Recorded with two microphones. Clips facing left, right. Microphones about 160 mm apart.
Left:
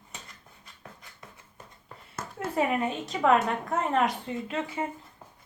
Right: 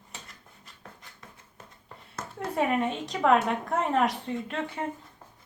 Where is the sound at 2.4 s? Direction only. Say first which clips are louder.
Even; centre (ahead or behind).